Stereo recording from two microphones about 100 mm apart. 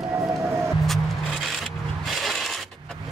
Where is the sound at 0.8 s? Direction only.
Centre (ahead or behind).